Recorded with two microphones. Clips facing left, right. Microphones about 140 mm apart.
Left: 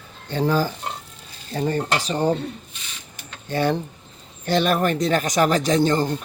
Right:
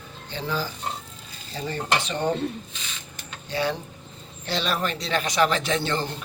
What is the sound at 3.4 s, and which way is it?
Cutlery, 50° left (ahead or behind).